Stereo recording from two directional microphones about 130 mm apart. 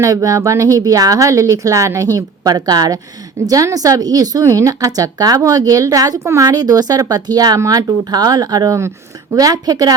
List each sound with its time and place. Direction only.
0.0 s speech: 25° right (ahead or behind)